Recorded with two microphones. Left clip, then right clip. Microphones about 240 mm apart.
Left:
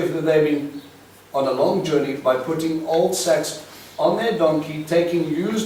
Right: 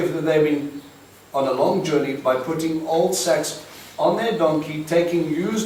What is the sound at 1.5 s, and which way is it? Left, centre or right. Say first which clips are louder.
Speech: even; left.